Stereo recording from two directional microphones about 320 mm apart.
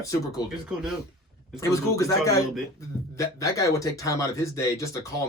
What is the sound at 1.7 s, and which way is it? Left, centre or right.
A man's voice, centre.